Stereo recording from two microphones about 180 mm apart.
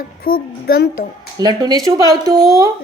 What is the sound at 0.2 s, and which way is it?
Speech, 55° left (ahead or behind).